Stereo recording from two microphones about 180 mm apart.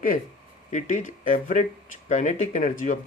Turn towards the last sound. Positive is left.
turn(degrees=45)  # may be behind; listen again after turning